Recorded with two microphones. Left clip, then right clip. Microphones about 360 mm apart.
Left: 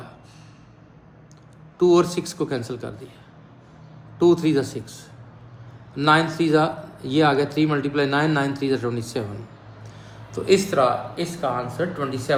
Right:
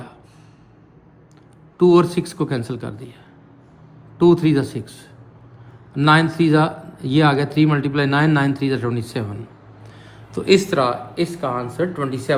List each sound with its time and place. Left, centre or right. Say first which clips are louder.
1.8 s a man's voice: right 3 dB; centre
4.2 s a man's voice: right 3 dB; centre